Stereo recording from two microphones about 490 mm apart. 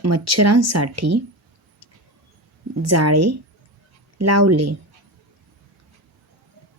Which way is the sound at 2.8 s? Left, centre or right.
Right.